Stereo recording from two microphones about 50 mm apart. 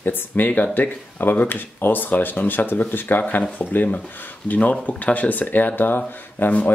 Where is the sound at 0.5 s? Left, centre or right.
Left.